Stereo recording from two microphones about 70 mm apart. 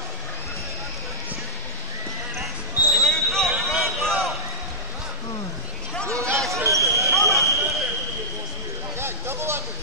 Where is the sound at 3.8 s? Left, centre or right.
Centre.